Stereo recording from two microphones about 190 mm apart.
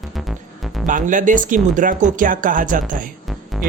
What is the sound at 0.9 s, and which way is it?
Speech, 45° right (ahead or behind).